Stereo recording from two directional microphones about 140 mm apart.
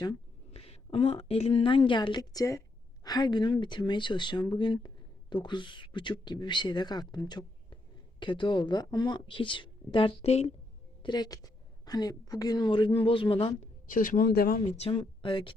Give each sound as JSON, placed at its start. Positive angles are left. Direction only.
{"t": 0.5, "sound": "a woman's voice", "side_deg": 45}
{"t": 11.0, "sound": "a woman's voice", "side_deg": 30}
{"t": 13.9, "sound": "speech", "side_deg": 75}
{"t": 14.6, "sound": "speech", "side_deg": 45}